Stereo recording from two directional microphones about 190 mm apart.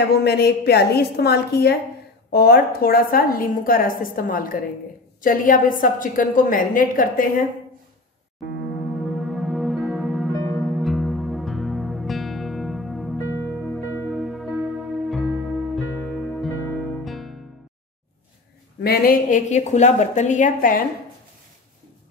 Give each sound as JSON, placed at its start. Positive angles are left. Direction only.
{"t": 0.1, "sound": "a woman's voice", "side_deg": 60}
{"t": 8.7, "sound": "music", "side_deg": 0}
{"t": 18.8, "sound": "a woman's voice", "side_deg": 50}